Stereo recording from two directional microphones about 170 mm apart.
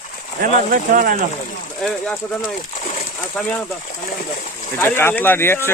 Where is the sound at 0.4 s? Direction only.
55° right (ahead or behind).